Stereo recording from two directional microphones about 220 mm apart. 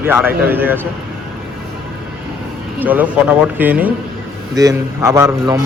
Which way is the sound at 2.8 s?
10° right (ahead or behind).